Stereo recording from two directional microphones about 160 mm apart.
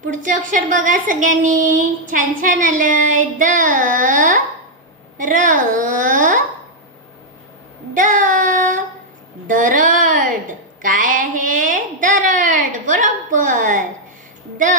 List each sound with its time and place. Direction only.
0.0 s a woman's voice: 55° right (ahead or behind)
7.9 s child singing: 55° right (ahead or behind)
9.5 s a sound: 55° right (ahead or behind)